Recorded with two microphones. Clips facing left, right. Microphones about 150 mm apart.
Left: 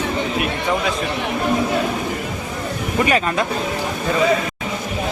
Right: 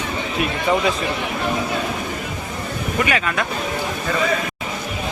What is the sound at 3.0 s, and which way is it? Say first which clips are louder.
Speech: left 5 dB; 35° left (ahead or behind).